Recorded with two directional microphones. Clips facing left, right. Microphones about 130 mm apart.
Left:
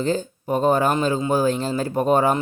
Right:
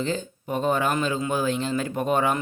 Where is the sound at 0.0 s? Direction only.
40° left (ahead or behind).